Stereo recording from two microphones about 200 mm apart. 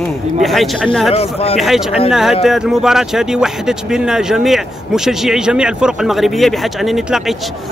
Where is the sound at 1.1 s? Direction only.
30° left (ahead or behind).